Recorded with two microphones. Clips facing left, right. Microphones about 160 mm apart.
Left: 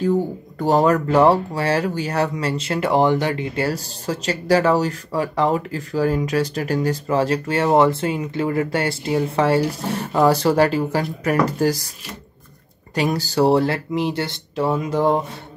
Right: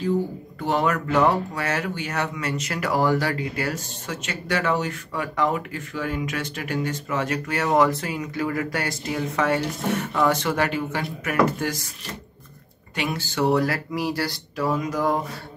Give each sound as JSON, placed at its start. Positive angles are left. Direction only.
{"t": 0.6, "sound": "speech", "side_deg": 40}
{"t": 12.9, "sound": "speech", "side_deg": 40}